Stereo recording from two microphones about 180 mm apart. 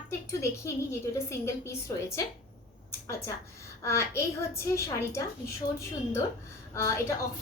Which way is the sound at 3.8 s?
15° left (ahead or behind).